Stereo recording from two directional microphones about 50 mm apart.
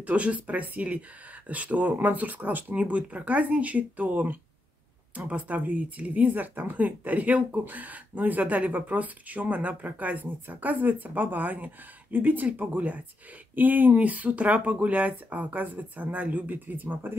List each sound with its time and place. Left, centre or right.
0.0 s speech: right